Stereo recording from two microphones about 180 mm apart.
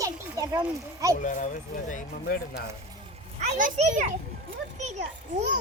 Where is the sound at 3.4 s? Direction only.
40° right (ahead or behind).